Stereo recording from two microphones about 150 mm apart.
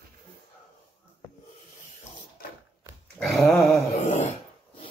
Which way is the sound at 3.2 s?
Centre (ahead or behind).